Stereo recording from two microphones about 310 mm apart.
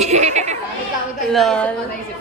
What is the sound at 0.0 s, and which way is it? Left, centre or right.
Chatter, right.